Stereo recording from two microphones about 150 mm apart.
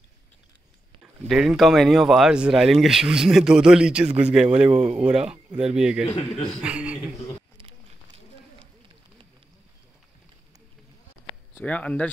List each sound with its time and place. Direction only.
1.2 s speech: centre (ahead or behind)
6.0 s a man's voice: 40° left (ahead or behind)
6.6 s a sound: 5° right (ahead or behind)
11.5 s speech: 10° left (ahead or behind)